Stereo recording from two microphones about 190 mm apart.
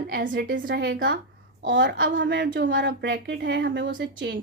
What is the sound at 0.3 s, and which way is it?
A woman's voice, 75° right (ahead or behind).